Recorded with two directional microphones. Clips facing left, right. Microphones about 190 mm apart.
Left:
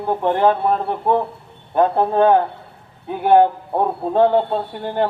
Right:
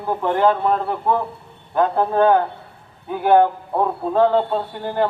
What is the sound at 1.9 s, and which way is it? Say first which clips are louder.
Speech: even; 25° left (ahead or behind).